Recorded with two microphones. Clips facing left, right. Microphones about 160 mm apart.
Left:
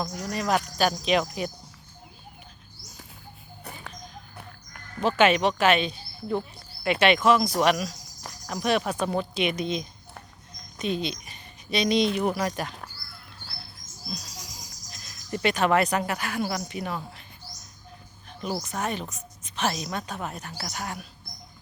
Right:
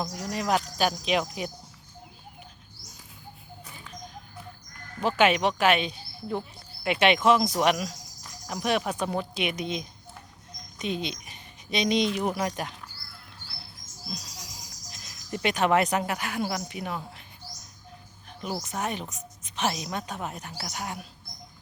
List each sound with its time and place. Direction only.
0.2 s a woman's voice: 15° right (ahead or behind)
3.6 s bird: 65° left (ahead or behind)
5.0 s a woman's voice: 10° right (ahead or behind)
10.8 s a sound: 15° right (ahead or behind)
12.2 s a woman's voice: 15° right (ahead or behind)
14.8 s speech: 15° right (ahead or behind)
18.3 s music: 10° right (ahead or behind)
18.6 s a woman's voice: 15° right (ahead or behind)